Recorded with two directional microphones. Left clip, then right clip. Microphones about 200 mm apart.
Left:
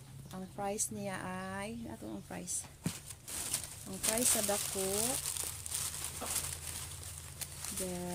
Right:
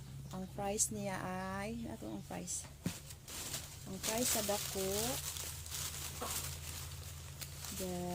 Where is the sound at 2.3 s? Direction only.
20° left (ahead or behind).